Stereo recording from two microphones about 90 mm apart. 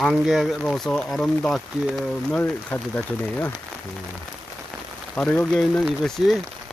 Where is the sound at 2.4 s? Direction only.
20° left (ahead or behind).